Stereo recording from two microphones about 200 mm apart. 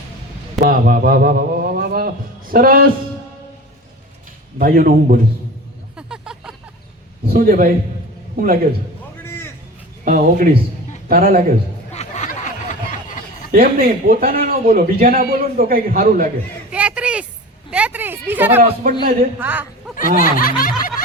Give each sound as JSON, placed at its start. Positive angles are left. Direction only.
{"t": 0.6, "sound": "a man's voice", "side_deg": -45}
{"t": 4.5, "sound": "a man's voice", "side_deg": -45}
{"t": 6.0, "sound": "vehicle", "side_deg": -5}
{"t": 7.3, "sound": "a man's voice", "side_deg": -45}
{"t": 9.2, "sound": "a sound", "side_deg": 10}
{"t": 10.0, "sound": "a man's voice", "side_deg": -45}
{"t": 11.9, "sound": "a sound", "side_deg": 35}
{"t": 13.5, "sound": "a man's voice", "side_deg": -50}
{"t": 16.7, "sound": "a sound", "side_deg": -5}
{"t": 18.6, "sound": "a man's voice", "side_deg": -45}
{"t": 19.4, "sound": "speech", "side_deg": -10}
{"t": 20.0, "sound": "snicker", "side_deg": 45}